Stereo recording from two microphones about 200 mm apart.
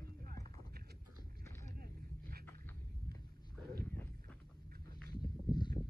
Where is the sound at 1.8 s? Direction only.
50° right (ahead or behind).